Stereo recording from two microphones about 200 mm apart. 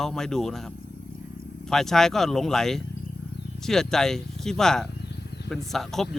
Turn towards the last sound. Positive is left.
turn(degrees=0)  # may be behind; listen again after turning